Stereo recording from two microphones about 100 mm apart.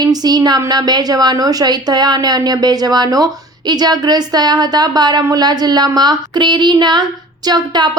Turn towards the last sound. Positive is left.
turn(degrees=-45)  # may be behind; listen again after turning